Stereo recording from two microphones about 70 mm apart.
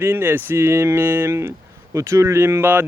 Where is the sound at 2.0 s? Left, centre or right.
Right.